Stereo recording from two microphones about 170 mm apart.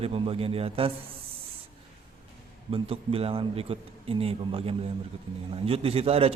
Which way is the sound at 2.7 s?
35° right (ahead or behind).